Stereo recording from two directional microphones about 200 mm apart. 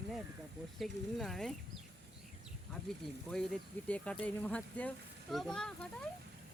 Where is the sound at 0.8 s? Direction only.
Centre (ahead or behind).